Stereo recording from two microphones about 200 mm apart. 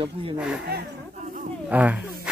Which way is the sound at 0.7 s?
50° right (ahead or behind).